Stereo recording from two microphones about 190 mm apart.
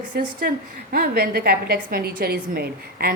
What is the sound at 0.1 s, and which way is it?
A woman's voice, 45° right (ahead or behind).